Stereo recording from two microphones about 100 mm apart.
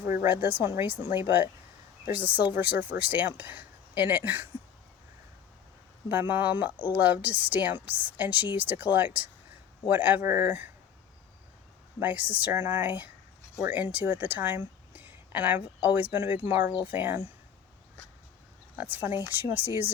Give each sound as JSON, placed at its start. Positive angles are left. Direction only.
{"t": 0.1, "sound": "a woman's voice", "side_deg": -20}
{"t": 6.1, "sound": "a woman's voice", "side_deg": -20}
{"t": 11.9, "sound": "a woman's voice", "side_deg": -20}
{"t": 18.8, "sound": "speech", "side_deg": -20}